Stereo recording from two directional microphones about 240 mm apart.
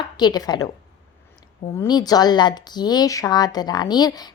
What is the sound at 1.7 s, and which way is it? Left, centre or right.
Speech, centre.